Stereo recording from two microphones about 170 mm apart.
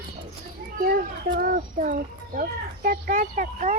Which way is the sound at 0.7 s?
55° right (ahead or behind).